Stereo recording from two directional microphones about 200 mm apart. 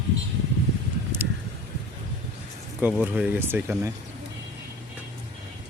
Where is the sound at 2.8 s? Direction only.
5° right (ahead or behind).